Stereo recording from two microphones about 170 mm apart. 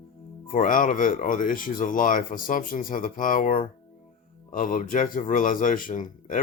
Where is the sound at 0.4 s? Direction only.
50° left (ahead or behind).